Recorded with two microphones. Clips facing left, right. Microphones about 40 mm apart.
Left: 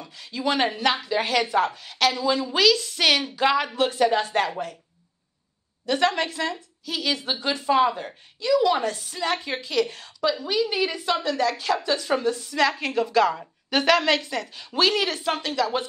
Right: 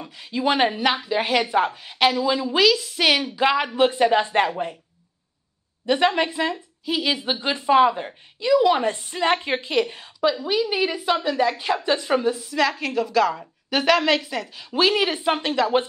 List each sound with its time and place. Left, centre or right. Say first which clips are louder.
0.0 s a woman's voice: right 4 dB; right
2.2 s a woman's voice: right 1 dB; centre; by 4.7 s right
5.9 s a woman's voice: right 3 dB; centre